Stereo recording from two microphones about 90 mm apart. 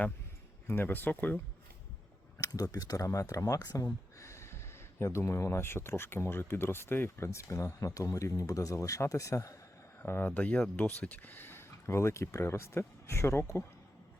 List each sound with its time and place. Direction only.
0.7 s speech: 25° left (ahead or behind)
2.4 s speech: 40° left (ahead or behind)
3.8 s speech: 30° left (ahead or behind)
10.0 s speech: 20° left (ahead or behind)